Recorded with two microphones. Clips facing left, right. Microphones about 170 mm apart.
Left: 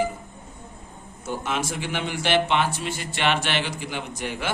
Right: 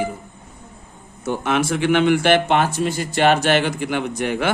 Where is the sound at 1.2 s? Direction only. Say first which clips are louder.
Right 7 dB; 65° right (ahead or behind).